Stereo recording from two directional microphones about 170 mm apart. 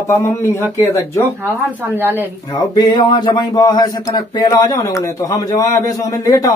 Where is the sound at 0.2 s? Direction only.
15° left (ahead or behind).